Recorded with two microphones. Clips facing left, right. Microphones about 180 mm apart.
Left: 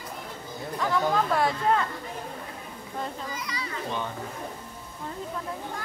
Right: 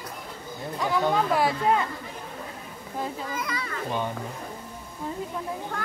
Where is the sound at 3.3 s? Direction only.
55° right (ahead or behind).